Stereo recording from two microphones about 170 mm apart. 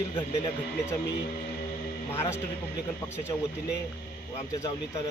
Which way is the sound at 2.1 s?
15° left (ahead or behind).